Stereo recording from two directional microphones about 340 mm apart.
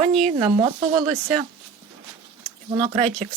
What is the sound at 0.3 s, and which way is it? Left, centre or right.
Speech, centre.